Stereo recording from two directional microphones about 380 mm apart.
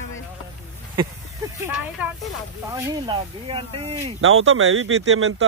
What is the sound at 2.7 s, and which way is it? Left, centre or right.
Speech, centre.